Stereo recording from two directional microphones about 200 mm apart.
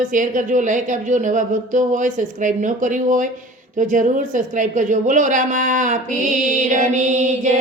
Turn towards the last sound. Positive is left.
turn(degrees=-35)  # may be behind; listen again after turning